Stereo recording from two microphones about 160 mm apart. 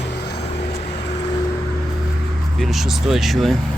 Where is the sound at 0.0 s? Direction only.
90° left.